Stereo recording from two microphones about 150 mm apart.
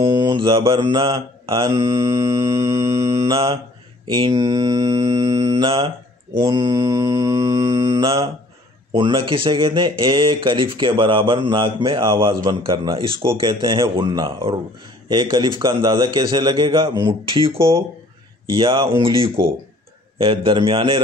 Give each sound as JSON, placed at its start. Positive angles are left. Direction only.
{"t": 0.0, "sound": "mantra", "side_deg": -30}
{"t": 0.7, "sound": "speech", "side_deg": -35}
{"t": 2.0, "sound": "mantra", "side_deg": -20}
{"t": 3.0, "sound": "mantra", "side_deg": -40}
{"t": 8.0, "sound": "speech", "side_deg": -40}
{"t": 15.6, "sound": "mantra", "side_deg": -30}
{"t": 16.9, "sound": "speech", "side_deg": -30}
{"t": 17.6, "sound": "mantra", "side_deg": -20}
{"t": 18.5, "sound": "speech", "side_deg": -35}